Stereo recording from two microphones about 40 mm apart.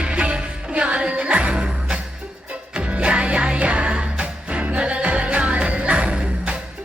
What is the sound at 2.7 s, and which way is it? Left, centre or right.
Music, right.